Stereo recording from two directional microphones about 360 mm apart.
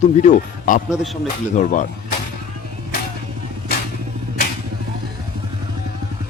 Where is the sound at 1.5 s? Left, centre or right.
Left.